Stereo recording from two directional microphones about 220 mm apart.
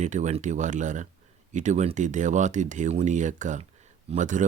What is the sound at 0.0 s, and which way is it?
Speech, 35° right (ahead or behind).